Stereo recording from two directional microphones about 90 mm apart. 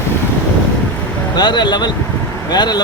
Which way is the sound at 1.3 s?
55° left (ahead or behind).